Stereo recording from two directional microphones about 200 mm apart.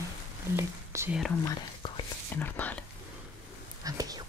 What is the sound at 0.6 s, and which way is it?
Speech, 10° right (ahead or behind).